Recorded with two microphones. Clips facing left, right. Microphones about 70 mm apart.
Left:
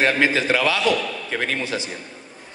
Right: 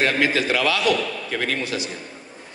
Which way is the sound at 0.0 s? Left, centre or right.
Left.